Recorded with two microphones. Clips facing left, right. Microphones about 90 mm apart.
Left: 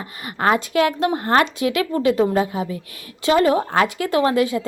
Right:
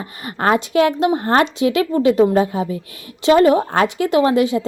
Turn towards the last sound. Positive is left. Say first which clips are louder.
# right 3 dB
turn(degrees=-25)  # may be behind; listen again after turning